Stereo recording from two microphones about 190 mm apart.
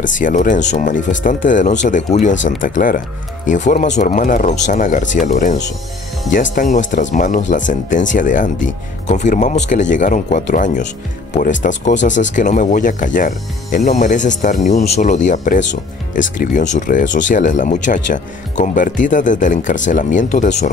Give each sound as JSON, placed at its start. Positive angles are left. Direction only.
{"t": 0.0, "sound": "speech", "side_deg": 45}